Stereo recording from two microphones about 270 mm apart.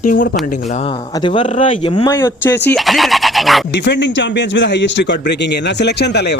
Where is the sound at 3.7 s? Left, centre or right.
Left.